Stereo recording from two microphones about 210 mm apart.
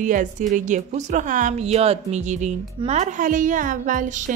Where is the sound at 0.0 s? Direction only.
40° right (ahead or behind).